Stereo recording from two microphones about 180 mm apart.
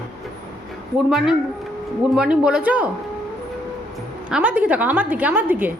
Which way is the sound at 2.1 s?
5° right (ahead or behind).